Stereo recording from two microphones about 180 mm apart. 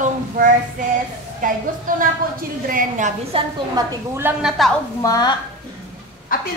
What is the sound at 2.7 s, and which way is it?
Speech, 45° right (ahead or behind).